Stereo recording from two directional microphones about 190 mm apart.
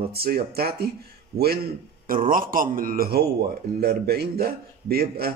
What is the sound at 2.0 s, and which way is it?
A man's voice, 45° right (ahead or behind).